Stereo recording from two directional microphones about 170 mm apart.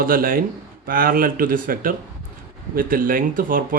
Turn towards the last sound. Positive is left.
turn(degrees=-55)  # may be behind; listen again after turning